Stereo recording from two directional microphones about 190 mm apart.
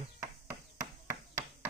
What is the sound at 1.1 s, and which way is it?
Tap, 15° right (ahead or behind).